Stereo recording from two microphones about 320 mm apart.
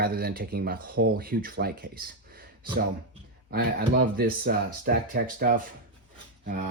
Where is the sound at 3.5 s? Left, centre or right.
Right.